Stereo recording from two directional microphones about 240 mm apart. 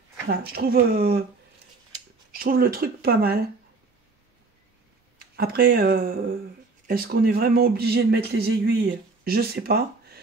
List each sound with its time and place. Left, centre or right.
0.5 s a man's voice: right
2.3 s a man's voice: right
5.3 s a man's voice: right